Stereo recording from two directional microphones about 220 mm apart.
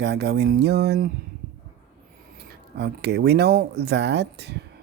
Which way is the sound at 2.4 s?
50° right (ahead or behind).